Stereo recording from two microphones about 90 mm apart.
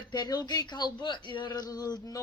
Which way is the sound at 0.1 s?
50° left (ahead or behind).